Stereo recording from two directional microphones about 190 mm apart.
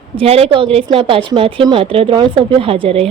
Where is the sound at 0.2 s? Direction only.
30° right (ahead or behind).